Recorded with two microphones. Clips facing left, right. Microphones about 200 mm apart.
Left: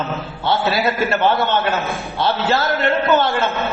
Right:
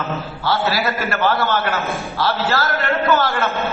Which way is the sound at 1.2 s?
20° left (ahead or behind).